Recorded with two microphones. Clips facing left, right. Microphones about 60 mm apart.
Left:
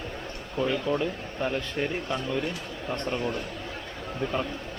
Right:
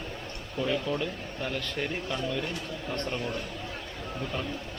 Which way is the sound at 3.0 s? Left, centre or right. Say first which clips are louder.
Left 6 dB; centre.